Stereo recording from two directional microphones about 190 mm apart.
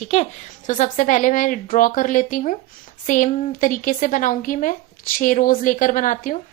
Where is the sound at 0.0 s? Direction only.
35° left (ahead or behind).